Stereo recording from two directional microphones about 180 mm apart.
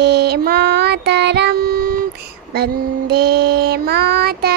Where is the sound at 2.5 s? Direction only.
60° right (ahead or behind).